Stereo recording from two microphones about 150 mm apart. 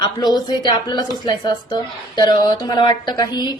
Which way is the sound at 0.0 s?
30° left (ahead or behind).